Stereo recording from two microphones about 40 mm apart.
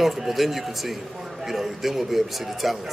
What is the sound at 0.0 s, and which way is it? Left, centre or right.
A man's voice, centre.